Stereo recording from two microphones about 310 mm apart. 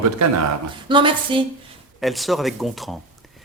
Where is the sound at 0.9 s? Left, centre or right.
Centre.